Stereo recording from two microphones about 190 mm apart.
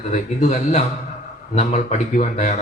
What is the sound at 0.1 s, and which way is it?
A man's voice, 40° left (ahead or behind).